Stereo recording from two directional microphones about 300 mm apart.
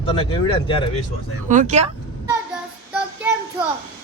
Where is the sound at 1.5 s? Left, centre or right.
Right.